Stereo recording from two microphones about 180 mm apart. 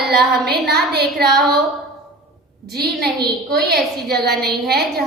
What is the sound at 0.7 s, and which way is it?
Speech, 60° right (ahead or behind).